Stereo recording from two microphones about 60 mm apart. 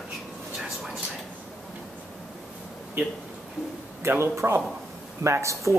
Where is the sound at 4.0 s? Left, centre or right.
Right.